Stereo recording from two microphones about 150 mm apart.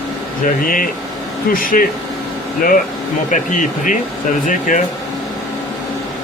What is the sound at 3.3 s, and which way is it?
Speech, 60° left (ahead or behind).